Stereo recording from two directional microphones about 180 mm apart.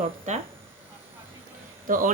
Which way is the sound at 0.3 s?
40° right (ahead or behind).